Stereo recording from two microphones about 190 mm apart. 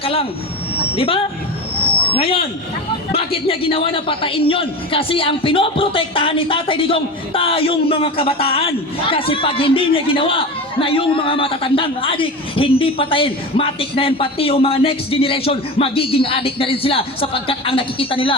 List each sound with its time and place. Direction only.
0.0 s a man's voice: 30° left (ahead or behind)